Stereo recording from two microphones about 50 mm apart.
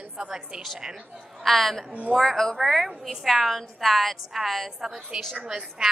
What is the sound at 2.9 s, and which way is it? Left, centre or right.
A woman's voice, centre.